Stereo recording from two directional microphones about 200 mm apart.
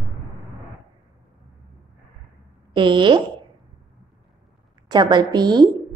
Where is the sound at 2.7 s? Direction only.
25° right (ahead or behind).